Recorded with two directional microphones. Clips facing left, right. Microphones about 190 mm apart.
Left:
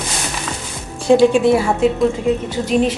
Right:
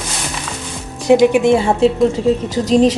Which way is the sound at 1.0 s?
15° right (ahead or behind).